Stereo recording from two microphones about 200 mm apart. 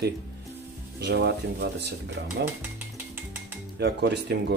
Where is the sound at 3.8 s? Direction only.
55° right (ahead or behind).